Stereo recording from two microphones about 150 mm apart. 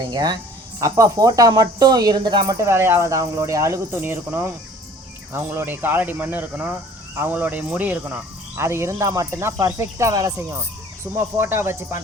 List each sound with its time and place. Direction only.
0.0 s speech: 25° right (ahead or behind)
2.6 s speech: 15° right (ahead or behind)